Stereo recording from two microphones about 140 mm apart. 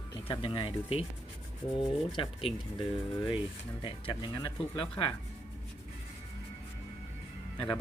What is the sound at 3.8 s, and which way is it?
Speech, 35° left (ahead or behind).